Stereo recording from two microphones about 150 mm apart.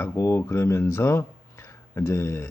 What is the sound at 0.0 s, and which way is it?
Speech, 20° left (ahead or behind).